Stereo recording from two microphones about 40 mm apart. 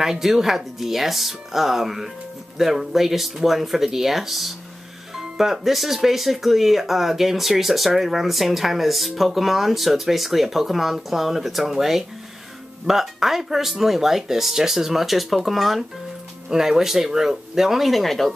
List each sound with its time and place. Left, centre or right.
0.0 s speech: centre
16.4 s speech: centre